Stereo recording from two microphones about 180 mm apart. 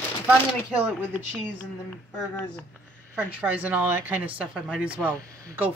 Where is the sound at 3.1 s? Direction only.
5° right (ahead or behind).